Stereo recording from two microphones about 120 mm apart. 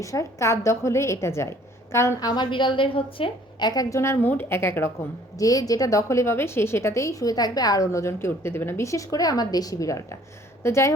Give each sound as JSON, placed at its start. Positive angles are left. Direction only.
{"t": 0.0, "sound": "a woman's voice", "side_deg": 25}
{"t": 2.3, "sound": "a woman's voice", "side_deg": 40}
{"t": 3.7, "sound": "a woman's voice", "side_deg": 30}